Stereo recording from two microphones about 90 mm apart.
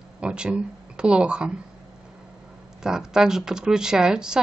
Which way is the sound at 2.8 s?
5° right (ahead or behind).